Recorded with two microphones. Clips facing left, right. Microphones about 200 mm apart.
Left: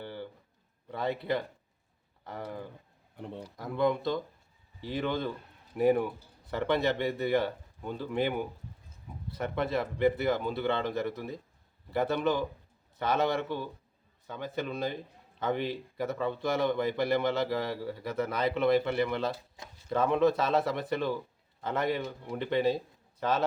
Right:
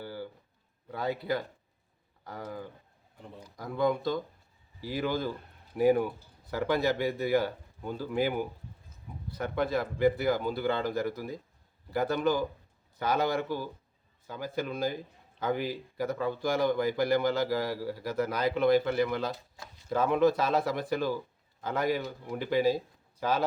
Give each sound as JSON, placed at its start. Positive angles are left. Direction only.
{"t": 0.0, "sound": "a sound", "side_deg": -5}
{"t": 0.9, "sound": "a man's voice", "side_deg": -5}
{"t": 3.2, "sound": "speech", "side_deg": 65}
{"t": 3.6, "sound": "a man's voice", "side_deg": 0}
{"t": 19.6, "sound": "a sound", "side_deg": 20}
{"t": 19.9, "sound": "a man's voice", "side_deg": -5}